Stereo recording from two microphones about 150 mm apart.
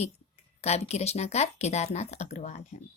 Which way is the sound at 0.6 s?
45° left (ahead or behind).